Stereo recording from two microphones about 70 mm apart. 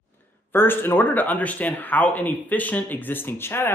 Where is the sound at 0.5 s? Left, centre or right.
Left.